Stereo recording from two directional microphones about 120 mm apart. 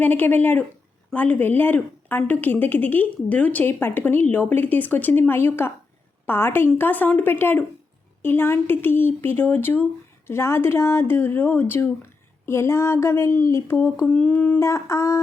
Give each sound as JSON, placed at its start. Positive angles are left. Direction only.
{"t": 0.0, "sound": "speech", "side_deg": 15}
{"t": 14.1, "sound": "speech", "side_deg": 10}
{"t": 14.6, "sound": "speech", "side_deg": 25}